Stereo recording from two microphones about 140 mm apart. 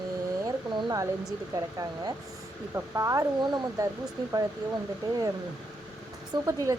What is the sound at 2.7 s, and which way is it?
Speech, 20° right (ahead or behind).